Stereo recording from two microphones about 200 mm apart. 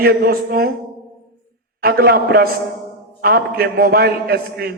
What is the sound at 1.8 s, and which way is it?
A man's voice, 50° right (ahead or behind).